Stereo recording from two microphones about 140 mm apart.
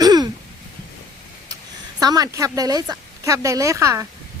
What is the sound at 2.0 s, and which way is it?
Speech, 25° right (ahead or behind).